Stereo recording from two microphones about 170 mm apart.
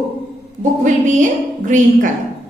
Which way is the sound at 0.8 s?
50° right (ahead or behind).